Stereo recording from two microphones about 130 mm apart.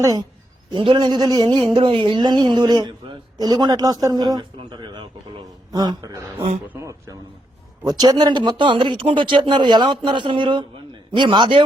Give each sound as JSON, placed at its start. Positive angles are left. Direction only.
{"t": 0.0, "sound": "speech", "side_deg": -25}
{"t": 0.7, "sound": "speech", "side_deg": -35}